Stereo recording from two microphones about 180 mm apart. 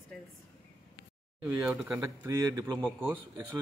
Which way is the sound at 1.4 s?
10° right (ahead or behind).